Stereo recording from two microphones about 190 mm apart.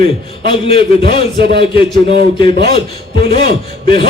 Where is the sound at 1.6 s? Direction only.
25° left (ahead or behind).